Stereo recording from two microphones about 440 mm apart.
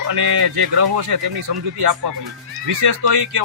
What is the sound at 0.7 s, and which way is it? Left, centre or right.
A man's voice, right.